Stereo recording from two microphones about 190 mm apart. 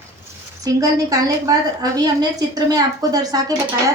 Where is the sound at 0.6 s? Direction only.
20° right (ahead or behind).